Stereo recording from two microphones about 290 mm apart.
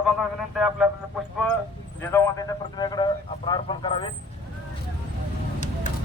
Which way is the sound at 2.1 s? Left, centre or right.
Centre.